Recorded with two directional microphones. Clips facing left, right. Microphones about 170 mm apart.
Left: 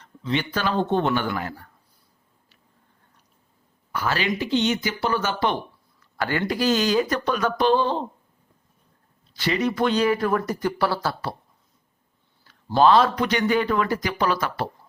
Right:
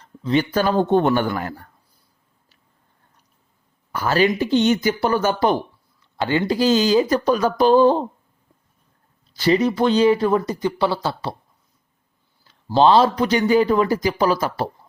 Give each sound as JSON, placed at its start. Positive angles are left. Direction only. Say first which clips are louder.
{"t": 0.0, "sound": "speech", "louder": "right 6 dB", "side_deg": -40}
{"t": 3.9, "sound": "speech", "louder": "right 7 dB", "side_deg": -40}
{"t": 6.1, "sound": "speech", "louder": "right 5 dB", "side_deg": -20}
{"t": 9.3, "sound": "speech", "louder": "right 6 dB", "side_deg": -35}
{"t": 12.7, "sound": "speech", "louder": "right 3 dB", "side_deg": -30}